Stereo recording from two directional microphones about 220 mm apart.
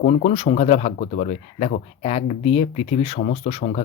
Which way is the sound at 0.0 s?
35° left (ahead or behind).